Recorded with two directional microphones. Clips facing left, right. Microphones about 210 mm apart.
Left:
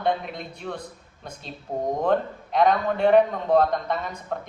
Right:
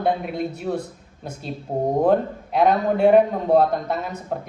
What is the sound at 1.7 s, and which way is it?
Speech, 25° right (ahead or behind).